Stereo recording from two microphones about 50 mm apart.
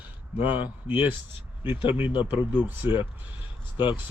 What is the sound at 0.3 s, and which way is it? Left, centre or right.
Speech, right.